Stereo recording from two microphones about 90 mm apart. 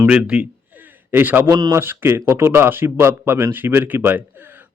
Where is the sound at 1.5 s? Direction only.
45° right (ahead or behind).